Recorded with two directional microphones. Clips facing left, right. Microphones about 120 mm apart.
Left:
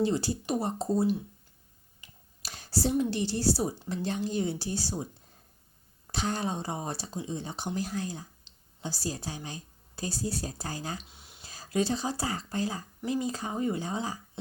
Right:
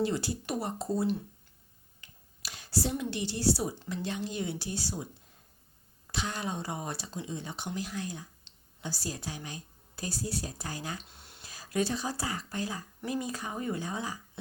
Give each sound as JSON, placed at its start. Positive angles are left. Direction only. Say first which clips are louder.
{"t": 0.0, "sound": "speech", "louder": "left 3 dB", "side_deg": 30}
{"t": 2.4, "sound": "speech", "louder": "left 2 dB", "side_deg": 35}
{"t": 6.1, "sound": "a woman's voice", "louder": "left 4 dB", "side_deg": 35}
{"t": 11.1, "sound": "a sound", "louder": "even", "side_deg": 0}
{"t": 11.4, "sound": "speech", "louder": "left 2 dB", "side_deg": 30}